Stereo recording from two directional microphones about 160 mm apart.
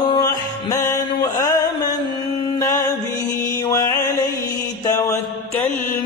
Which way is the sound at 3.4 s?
20° left (ahead or behind).